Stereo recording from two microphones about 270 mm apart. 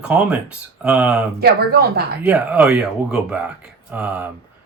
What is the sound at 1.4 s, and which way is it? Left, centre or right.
Speech, right.